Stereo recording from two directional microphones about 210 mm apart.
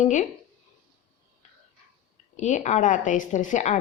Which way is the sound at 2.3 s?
35° left (ahead or behind).